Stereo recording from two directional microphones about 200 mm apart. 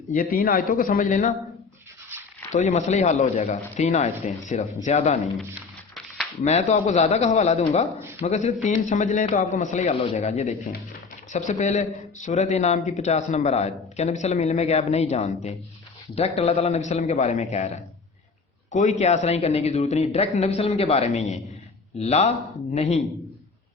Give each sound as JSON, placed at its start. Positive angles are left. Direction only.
{"t": 0.1, "sound": "speech", "side_deg": 45}
{"t": 2.5, "sound": "a man's voice", "side_deg": 35}
{"t": 6.4, "sound": "a man's voice", "side_deg": 35}
{"t": 18.7, "sound": "a man's voice", "side_deg": 35}